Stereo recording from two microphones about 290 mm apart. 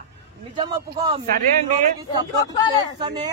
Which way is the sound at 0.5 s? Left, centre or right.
Centre.